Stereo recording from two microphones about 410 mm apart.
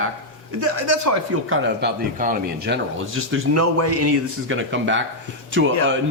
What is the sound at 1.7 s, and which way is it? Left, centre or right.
Speech, right.